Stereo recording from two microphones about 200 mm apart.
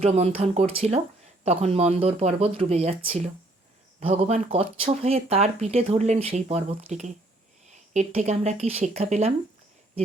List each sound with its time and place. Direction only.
0.0 s speech: 30° right (ahead or behind)